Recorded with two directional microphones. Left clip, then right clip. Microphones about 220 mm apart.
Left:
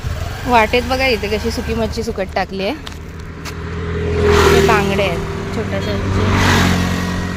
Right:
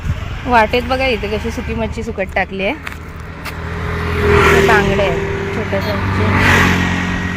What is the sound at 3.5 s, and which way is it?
Vehicle, 45° right (ahead or behind).